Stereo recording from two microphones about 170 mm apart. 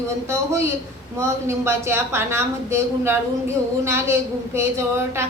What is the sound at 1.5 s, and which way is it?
A woman's voice, 15° right (ahead or behind).